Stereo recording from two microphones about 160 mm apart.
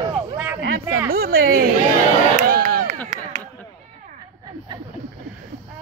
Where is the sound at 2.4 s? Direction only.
55° right (ahead or behind).